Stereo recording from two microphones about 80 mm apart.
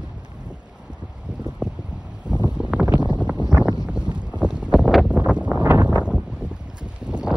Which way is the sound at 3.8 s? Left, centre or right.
Centre.